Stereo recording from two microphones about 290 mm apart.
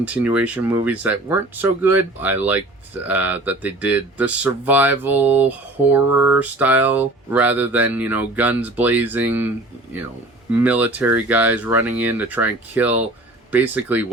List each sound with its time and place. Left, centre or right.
0.0 s speech: centre
6.1 s a sound: left
6.3 s speech: centre
10.6 s speech: centre